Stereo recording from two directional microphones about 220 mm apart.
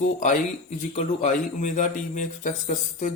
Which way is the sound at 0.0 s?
35° left (ahead or behind).